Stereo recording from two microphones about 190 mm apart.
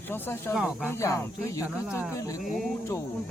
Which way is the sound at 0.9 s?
15° left (ahead or behind).